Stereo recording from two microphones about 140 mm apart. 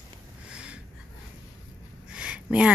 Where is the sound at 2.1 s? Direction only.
5° right (ahead or behind).